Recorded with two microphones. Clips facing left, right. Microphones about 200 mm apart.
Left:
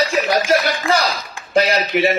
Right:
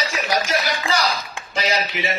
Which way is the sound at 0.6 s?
55° left (ahead or behind).